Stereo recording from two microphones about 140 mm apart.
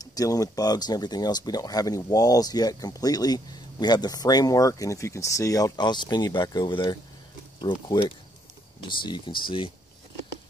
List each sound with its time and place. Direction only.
0.0 s speech: 25° left (ahead or behind)
8.8 s speech: 35° left (ahead or behind)